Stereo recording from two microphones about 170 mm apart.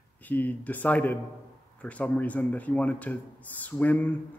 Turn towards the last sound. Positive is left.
turn(degrees=10)  # may be behind; listen again after turning